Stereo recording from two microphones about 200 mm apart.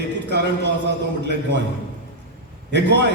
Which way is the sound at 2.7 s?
60° right (ahead or behind).